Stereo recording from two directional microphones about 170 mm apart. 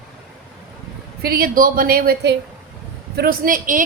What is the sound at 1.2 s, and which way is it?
A woman's voice, 65° right (ahead or behind).